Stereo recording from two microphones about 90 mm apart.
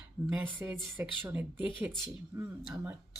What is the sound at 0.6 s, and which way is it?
Speech, 25° right (ahead or behind).